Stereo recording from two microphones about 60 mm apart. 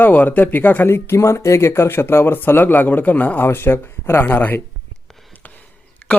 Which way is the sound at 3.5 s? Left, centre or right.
Left.